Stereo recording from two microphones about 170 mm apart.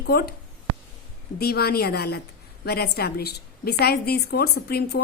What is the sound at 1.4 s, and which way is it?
A woman's voice, 65° left (ahead or behind).